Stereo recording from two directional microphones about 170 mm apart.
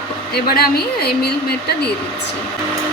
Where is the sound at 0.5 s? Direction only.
65° left (ahead or behind).